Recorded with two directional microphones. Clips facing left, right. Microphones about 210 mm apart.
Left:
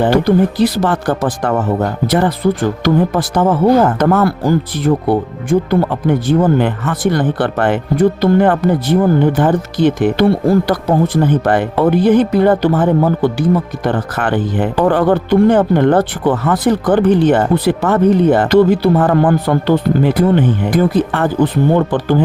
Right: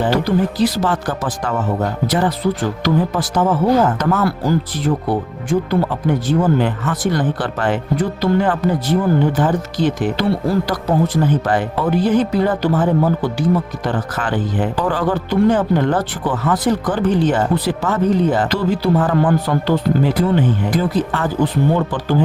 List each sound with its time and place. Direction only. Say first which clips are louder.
0.0 s speech: left 5 dB; 55° left (ahead or behind)